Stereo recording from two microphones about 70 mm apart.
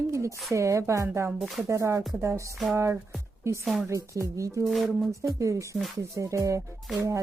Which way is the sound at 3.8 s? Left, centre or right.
Right.